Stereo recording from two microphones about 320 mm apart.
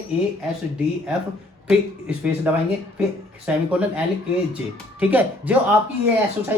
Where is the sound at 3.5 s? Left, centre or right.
Centre.